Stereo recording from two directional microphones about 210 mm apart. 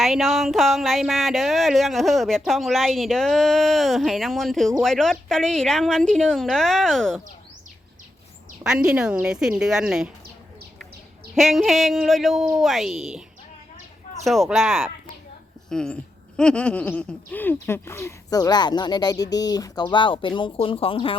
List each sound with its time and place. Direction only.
0.0 s speech: centre (ahead or behind)
8.6 s speech: 5° right (ahead or behind)
11.3 s speech: centre (ahead or behind)
14.3 s speech: centre (ahead or behind); by 21.2 s 25° left (ahead or behind)